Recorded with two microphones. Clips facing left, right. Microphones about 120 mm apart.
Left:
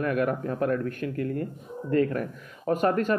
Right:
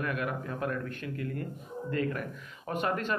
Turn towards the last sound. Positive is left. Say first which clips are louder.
# left 8 dB
turn(degrees=40)  # may be behind; listen again after turning